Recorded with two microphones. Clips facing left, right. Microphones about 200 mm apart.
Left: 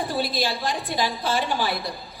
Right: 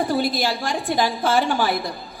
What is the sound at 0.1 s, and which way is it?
A woman's voice, 50° right (ahead or behind).